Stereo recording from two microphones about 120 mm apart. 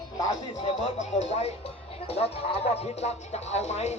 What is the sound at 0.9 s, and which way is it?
Music, 65° left (ahead or behind).